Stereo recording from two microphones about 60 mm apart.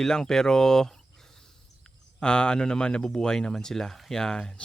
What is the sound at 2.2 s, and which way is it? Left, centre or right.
A man's voice, centre.